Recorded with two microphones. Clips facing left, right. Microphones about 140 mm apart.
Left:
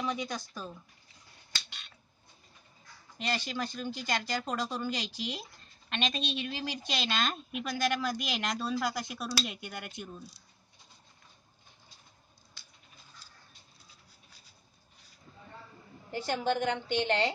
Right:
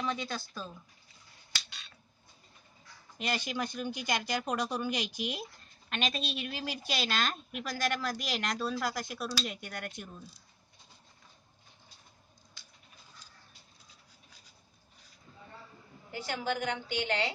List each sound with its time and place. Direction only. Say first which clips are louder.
0.0 s speech: left 1 dB; 15° left (ahead or behind)
3.2 s a woman's voice: even; 10° right (ahead or behind); by 10.3 s 5° left (ahead or behind)
16.4 s a woman's voice: left 3 dB; 30° left (ahead or behind)